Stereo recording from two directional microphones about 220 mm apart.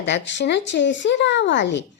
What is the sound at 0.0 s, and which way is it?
Speech, 55° left (ahead or behind).